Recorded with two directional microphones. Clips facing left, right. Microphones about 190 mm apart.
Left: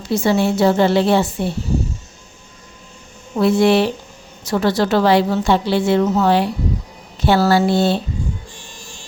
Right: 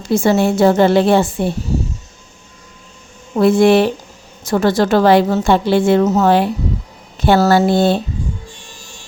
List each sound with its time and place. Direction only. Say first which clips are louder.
0.1 s a woman's voice: right 3 dB; 50° right (ahead or behind)
3.3 s a woman's voice: right 3 dB; 50° right (ahead or behind)